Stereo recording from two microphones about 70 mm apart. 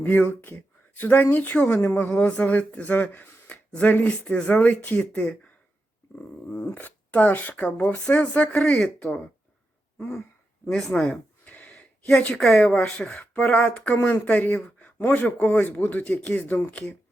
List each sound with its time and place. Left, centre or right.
0.0 s speech: left
6.7 s speech: left
8.5 s speech: centre
9.0 s speech: centre
10.7 s speech: centre
11.0 s a sound: centre
12.6 s speech: centre
13.9 s speech: left